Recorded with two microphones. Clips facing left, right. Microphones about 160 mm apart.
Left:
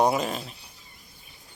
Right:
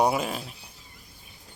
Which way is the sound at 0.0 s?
5° right (ahead or behind).